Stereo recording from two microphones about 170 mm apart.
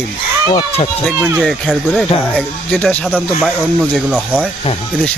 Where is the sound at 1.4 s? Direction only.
Centre (ahead or behind).